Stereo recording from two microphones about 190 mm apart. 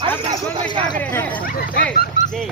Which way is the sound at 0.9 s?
10° left (ahead or behind).